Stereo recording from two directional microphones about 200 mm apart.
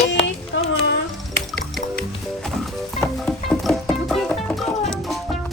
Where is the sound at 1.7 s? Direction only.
5° left (ahead or behind).